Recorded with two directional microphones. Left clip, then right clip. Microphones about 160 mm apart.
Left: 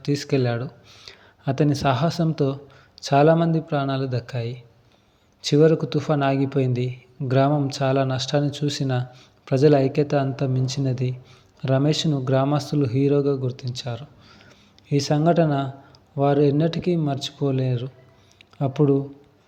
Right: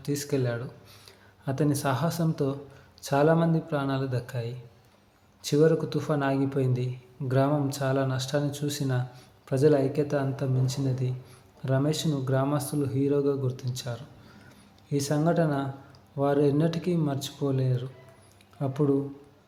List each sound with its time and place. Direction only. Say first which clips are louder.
0.0 s speech: left 6 dB; 25° left (ahead or behind)